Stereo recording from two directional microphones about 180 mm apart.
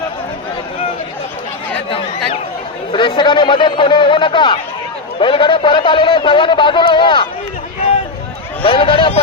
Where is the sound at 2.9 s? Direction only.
25° left (ahead or behind).